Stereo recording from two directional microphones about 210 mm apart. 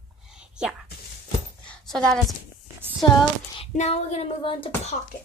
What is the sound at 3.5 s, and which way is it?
Speech, 30° left (ahead or behind).